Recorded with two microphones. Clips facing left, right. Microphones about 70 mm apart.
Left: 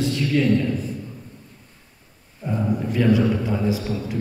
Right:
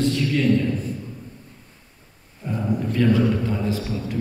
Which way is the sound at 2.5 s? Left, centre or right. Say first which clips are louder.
Left 1 dB; centre.